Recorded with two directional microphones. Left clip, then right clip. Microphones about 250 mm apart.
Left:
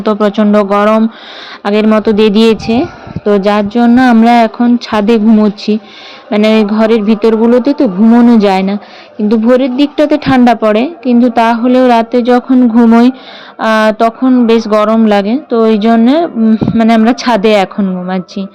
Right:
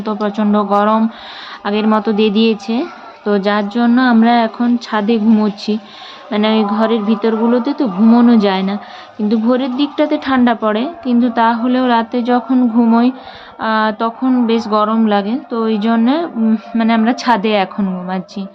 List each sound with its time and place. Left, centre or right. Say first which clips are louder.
0.0 s speech: left 8 dB; left